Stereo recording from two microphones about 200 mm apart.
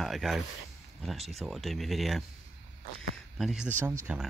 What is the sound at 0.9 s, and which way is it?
Speech, centre (ahead or behind).